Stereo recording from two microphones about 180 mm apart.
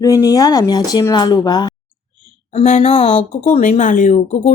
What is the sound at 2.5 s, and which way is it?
Speech, 40° left (ahead or behind).